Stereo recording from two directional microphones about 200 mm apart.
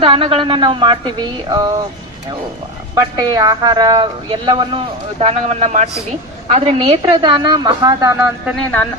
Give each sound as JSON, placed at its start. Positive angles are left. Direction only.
{"t": 0.0, "sound": "speech", "side_deg": -30}
{"t": 2.9, "sound": "speech", "side_deg": -20}
{"t": 8.4, "sound": "speech", "side_deg": 0}